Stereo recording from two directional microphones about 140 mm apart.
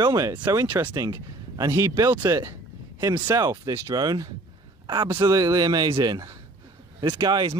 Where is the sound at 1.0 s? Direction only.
25° right (ahead or behind).